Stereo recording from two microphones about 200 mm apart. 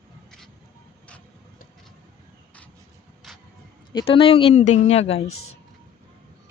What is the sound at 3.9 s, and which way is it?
Speech, 25° left (ahead or behind).